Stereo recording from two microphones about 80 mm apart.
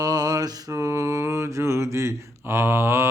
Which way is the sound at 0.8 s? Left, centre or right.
Right.